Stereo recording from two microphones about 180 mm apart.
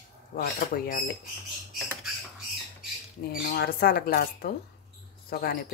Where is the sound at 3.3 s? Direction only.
55° left (ahead or behind).